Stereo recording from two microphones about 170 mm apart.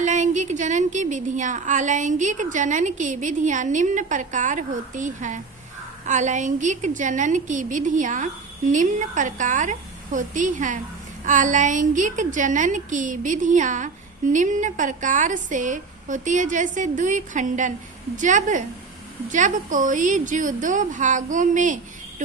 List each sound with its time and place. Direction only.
0.0 s a woman's voice: 45° right (ahead or behind)